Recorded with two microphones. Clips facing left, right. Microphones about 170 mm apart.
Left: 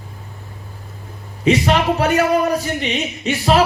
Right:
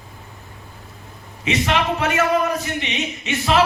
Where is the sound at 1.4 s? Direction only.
35° left (ahead or behind).